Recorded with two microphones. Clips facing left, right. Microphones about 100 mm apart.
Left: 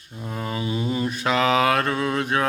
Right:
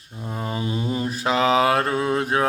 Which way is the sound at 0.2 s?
20° right (ahead or behind).